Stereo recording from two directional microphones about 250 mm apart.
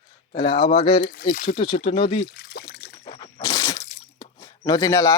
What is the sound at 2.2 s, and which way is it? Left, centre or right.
Trickle, left.